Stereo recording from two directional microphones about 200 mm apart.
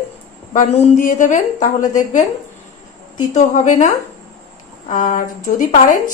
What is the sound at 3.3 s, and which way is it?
A woman's voice, 35° left (ahead or behind).